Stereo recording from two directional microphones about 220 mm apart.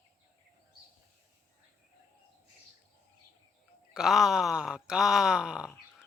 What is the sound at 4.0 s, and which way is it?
Speech, centre (ahead or behind).